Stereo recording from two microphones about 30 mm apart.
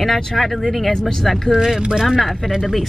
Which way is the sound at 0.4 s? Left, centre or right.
Centre.